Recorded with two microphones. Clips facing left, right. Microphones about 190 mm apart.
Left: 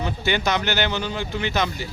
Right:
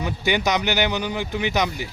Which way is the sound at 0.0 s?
15° right (ahead or behind).